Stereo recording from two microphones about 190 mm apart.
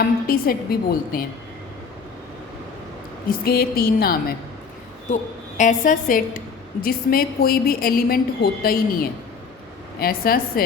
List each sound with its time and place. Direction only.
0.0 s a woman's voice: 50° left (ahead or behind)
3.2 s a woman's voice: 50° left (ahead or behind)
5.1 s a woman's voice: 40° left (ahead or behind)